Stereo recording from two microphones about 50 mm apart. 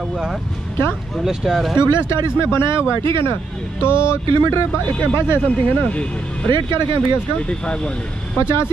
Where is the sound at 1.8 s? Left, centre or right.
Left.